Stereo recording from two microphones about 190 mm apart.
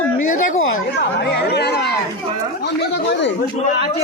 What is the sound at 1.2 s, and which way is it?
Speech, 65° left (ahead or behind).